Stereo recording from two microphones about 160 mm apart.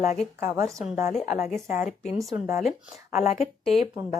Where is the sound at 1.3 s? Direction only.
45° left (ahead or behind).